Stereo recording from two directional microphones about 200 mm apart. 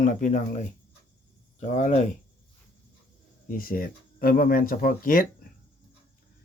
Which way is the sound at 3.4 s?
45° left (ahead or behind).